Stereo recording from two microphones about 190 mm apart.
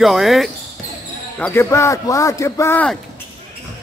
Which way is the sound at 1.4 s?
10° left (ahead or behind).